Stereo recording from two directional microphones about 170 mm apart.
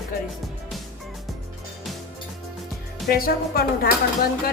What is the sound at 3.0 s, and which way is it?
Speech, 60° left (ahead or behind).